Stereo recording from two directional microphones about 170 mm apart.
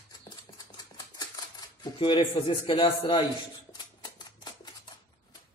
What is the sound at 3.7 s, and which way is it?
Shuffling cards, 25° left (ahead or behind).